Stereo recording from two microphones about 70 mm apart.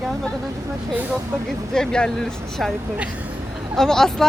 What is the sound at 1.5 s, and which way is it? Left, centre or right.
Speech, centre.